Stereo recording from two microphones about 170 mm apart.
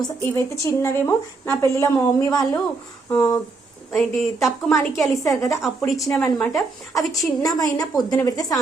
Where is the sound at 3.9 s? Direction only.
Centre (ahead or behind).